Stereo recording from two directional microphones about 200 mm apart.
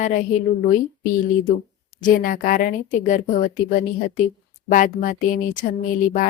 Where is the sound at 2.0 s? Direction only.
45° left (ahead or behind).